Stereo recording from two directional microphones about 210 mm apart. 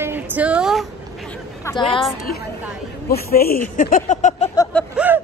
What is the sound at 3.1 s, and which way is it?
Speech, 45° left (ahead or behind).